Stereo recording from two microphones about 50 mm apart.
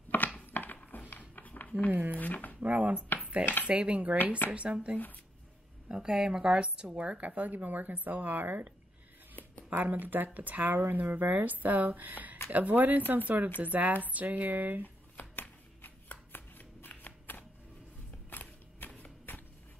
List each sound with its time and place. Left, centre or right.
0.1 s a sound: left
1.9 s speech: right
2.1 s speech: left
2.6 s a woman's voice: right
3.2 s cutlery: right
3.6 s a woman's voice: right
9.3 s a sound: left
9.7 s speech: right
15.1 s shuffling cards: left
18.3 s a sound: left